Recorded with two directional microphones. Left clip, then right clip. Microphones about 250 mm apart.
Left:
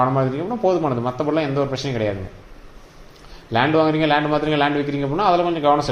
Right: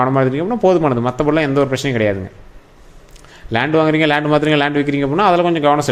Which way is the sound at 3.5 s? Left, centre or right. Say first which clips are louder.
Right 3 dB; right.